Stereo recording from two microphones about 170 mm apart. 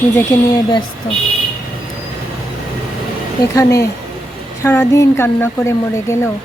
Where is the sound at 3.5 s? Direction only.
20° left (ahead or behind).